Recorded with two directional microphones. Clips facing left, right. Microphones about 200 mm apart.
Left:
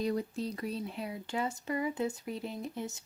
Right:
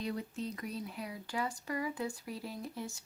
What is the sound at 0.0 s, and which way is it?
Speech, 40° left (ahead or behind).